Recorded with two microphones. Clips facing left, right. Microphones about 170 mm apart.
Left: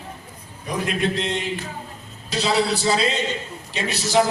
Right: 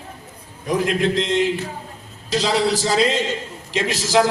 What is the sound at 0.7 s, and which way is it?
A man's voice, 90° right.